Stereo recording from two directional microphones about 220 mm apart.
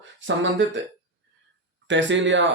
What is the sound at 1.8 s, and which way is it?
Speech, 55° right (ahead or behind).